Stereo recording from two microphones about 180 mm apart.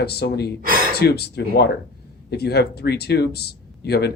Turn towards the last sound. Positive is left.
turn(degrees=65)  # may be behind; listen again after turning